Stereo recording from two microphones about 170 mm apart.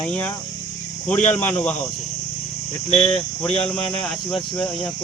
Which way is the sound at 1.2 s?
45° left (ahead or behind).